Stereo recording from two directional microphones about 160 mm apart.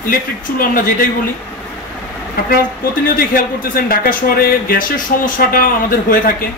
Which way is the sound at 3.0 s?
65° left (ahead or behind).